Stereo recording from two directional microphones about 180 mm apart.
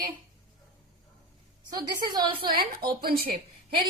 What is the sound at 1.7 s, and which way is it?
Speech, 25° right (ahead or behind).